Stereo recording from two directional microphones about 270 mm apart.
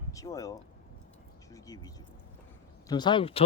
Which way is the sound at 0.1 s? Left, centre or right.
Centre.